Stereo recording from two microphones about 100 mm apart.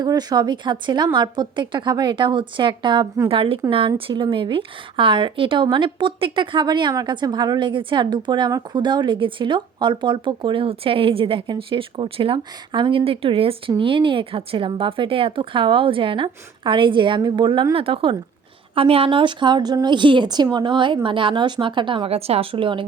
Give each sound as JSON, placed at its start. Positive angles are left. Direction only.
{"t": 0.0, "sound": "a woman's voice", "side_deg": -45}